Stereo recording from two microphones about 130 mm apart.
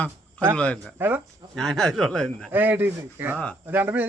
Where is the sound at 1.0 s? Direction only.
15° right (ahead or behind).